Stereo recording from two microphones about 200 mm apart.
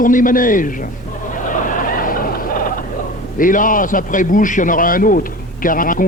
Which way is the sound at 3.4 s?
40° left (ahead or behind).